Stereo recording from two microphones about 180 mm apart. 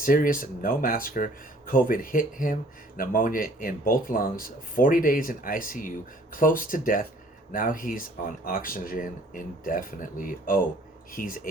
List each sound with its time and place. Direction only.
0.0 s speech: 50° left (ahead or behind)